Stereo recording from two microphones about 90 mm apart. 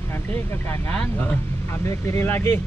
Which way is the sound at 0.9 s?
15° left (ahead or behind).